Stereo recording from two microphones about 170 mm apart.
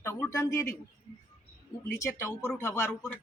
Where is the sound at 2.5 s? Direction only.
15° left (ahead or behind).